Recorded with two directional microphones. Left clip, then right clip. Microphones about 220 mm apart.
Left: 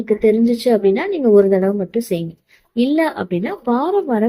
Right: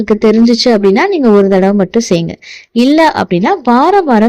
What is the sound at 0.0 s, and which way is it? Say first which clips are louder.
A woman's voice: right 6 dB; 40° right (ahead or behind).